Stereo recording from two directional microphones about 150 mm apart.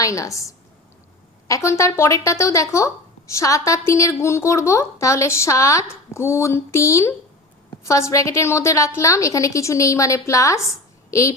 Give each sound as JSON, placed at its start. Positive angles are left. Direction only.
{"t": 0.0, "sound": "a woman's voice", "side_deg": 20}